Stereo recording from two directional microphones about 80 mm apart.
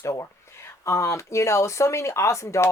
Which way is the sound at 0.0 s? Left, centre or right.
Left.